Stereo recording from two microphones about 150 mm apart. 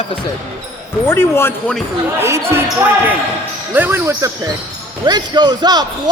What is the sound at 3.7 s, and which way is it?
A man's voice, 15° right (ahead or behind).